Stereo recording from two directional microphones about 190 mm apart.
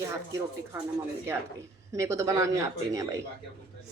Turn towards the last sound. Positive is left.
turn(degrees=-15)  # may be behind; listen again after turning